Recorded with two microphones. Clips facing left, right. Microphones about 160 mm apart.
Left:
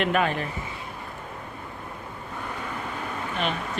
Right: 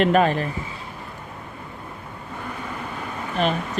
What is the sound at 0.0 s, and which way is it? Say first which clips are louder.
Speech: right 6 dB; 35° right (ahead or behind).